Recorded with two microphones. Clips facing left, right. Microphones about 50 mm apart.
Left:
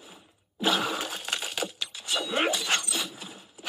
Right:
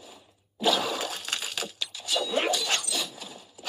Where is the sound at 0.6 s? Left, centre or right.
Left.